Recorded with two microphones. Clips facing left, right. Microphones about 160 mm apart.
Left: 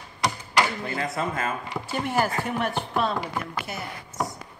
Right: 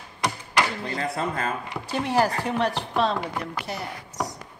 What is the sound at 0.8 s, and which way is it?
Speech, 35° right (ahead or behind).